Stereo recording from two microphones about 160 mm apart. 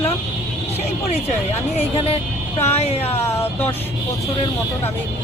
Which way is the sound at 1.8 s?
40° left (ahead or behind).